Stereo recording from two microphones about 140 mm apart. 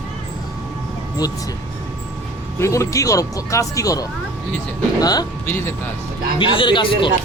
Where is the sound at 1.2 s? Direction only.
30° left (ahead or behind).